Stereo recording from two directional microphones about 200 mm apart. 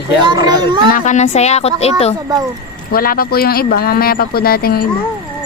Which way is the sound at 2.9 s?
45° left (ahead or behind).